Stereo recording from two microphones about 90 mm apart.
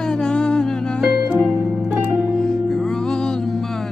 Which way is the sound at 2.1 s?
5° left (ahead or behind).